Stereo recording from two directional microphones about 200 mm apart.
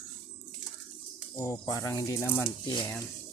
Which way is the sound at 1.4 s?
15° left (ahead or behind).